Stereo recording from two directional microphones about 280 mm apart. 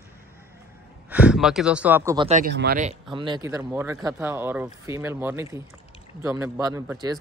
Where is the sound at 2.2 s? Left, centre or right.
Right.